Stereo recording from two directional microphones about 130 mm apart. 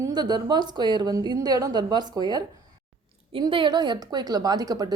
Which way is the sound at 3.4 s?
35° right (ahead or behind).